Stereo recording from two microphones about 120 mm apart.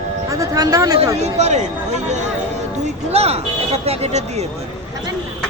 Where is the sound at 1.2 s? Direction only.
65° right (ahead or behind).